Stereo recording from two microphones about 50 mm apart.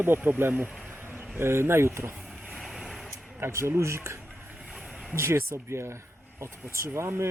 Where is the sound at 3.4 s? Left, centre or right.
Right.